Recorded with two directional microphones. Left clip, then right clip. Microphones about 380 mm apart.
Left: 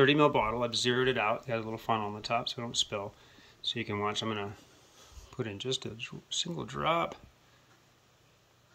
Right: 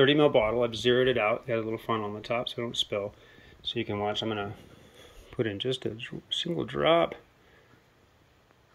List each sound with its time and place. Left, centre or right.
0.0 s speech: centre
0.4 s speech: centre
4.0 s speech: centre